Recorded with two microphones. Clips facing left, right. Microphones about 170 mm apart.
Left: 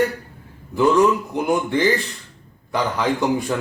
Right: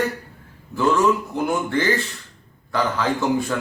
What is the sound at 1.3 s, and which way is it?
A man's voice, 15° left (ahead or behind).